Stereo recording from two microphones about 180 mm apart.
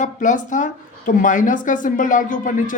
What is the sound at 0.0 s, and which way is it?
Speech, 45° left (ahead or behind).